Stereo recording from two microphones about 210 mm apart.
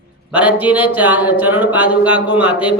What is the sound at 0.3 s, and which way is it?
Speech, 5° right (ahead or behind).